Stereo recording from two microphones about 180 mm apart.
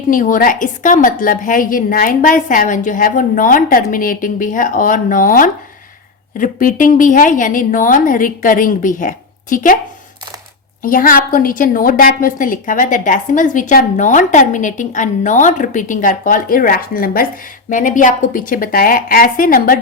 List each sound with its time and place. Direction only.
0.1 s a woman's voice: 50° left (ahead or behind)
10.8 s a woman's voice: 50° left (ahead or behind)